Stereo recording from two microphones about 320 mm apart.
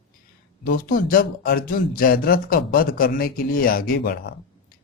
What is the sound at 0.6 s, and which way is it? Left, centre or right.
Speech, left.